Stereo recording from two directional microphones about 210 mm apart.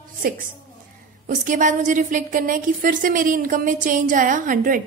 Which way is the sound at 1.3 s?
40° right (ahead or behind).